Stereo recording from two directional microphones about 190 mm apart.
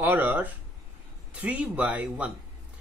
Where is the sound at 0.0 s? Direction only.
10° right (ahead or behind).